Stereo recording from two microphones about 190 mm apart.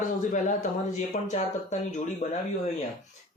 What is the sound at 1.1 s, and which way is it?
Speech, 35° left (ahead or behind).